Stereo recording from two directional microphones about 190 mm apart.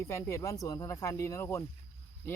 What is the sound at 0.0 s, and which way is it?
Speech, 15° left (ahead or behind).